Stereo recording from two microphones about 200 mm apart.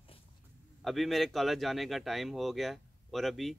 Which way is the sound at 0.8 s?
Centre (ahead or behind).